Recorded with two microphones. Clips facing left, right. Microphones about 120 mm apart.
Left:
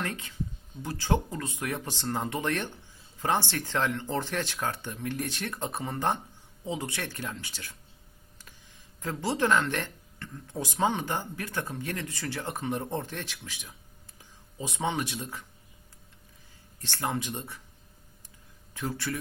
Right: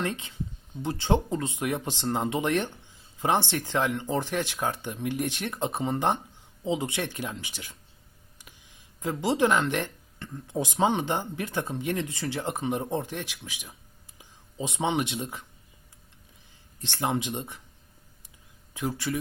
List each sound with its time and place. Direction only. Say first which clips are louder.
0.0 s speech: right 3 dB; 20° right (ahead or behind)
16.8 s speech: right 3 dB; 20° right (ahead or behind)
18.7 s speech: right 3 dB; 15° right (ahead or behind)